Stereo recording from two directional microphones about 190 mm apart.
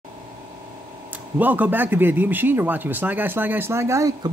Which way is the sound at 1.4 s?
10° right (ahead or behind).